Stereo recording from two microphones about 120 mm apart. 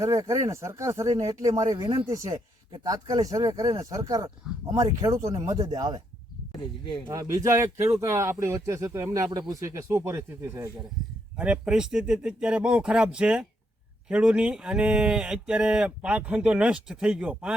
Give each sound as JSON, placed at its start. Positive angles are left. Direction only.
{"t": 0.0, "sound": "speech", "side_deg": -25}
{"t": 6.5, "sound": "speech", "side_deg": 40}
{"t": 7.1, "sound": "speech", "side_deg": -25}
{"t": 11.3, "sound": "speech", "side_deg": -10}